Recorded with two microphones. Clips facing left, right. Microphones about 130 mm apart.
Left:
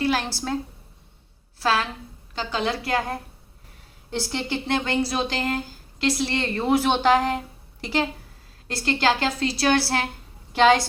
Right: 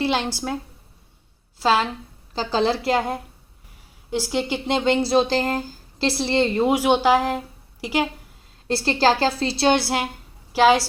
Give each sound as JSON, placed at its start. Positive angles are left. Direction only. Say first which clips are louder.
{"t": 0.0, "sound": "a woman's voice", "louder": "right 1 dB", "side_deg": -25}
{"t": 1.6, "sound": "a woman's voice", "louder": "right 4 dB", "side_deg": -25}
{"t": 4.1, "sound": "speech", "louder": "right 4 dB", "side_deg": -10}
{"t": 8.6, "sound": "a woman's voice", "louder": "right 4 dB", "side_deg": -30}
{"t": 10.5, "sound": "a woman's voice", "louder": "right 1 dB", "side_deg": -5}